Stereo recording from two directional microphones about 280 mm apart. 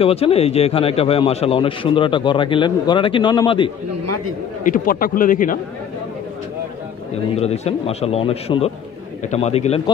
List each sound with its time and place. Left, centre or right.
0.0 s a man's voice: left
4.0 s speech: right
4.6 s a man's voice: left
7.3 s a man's voice: left